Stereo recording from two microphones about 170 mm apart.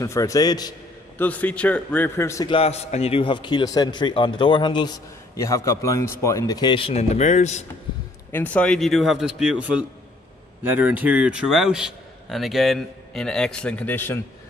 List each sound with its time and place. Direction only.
0.0 s a man's voice: 20° left (ahead or behind)
1.1 s a man's voice: 10° left (ahead or behind)
2.5 s a man's voice: 35° left (ahead or behind)
8.3 s a man's voice: 10° left (ahead or behind)